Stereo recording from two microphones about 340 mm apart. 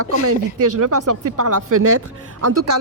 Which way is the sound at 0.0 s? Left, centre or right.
Right.